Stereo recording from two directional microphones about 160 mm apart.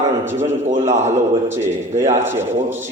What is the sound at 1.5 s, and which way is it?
Speech, 15° right (ahead or behind).